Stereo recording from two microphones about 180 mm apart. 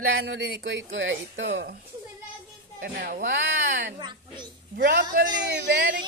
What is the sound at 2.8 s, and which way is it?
Speech, 55° right (ahead or behind).